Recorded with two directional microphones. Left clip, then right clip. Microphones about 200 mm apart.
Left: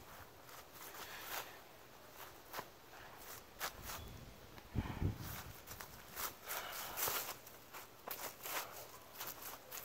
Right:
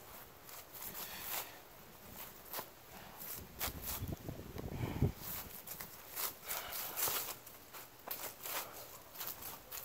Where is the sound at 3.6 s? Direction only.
10° right (ahead or behind).